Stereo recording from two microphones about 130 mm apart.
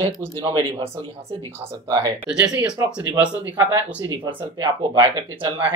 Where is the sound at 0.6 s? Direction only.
45° right (ahead or behind).